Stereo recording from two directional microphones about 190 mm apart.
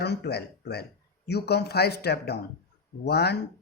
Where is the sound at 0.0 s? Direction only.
60° left (ahead or behind).